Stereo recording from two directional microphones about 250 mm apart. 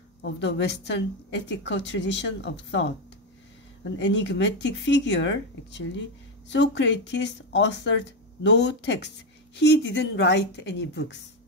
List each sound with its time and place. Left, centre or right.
0.2 s a woman's voice: left
4.0 s a woman's voice: left